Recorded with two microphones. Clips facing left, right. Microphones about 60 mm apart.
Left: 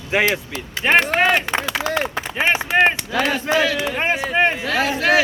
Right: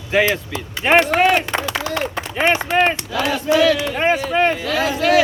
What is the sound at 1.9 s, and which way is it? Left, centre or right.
Speech, centre.